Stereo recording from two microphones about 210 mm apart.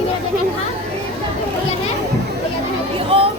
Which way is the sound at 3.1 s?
25° right (ahead or behind).